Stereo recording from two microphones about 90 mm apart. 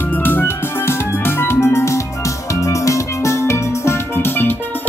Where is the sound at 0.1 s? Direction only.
25° left (ahead or behind).